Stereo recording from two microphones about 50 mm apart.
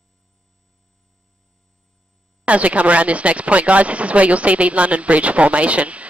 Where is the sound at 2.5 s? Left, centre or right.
Right.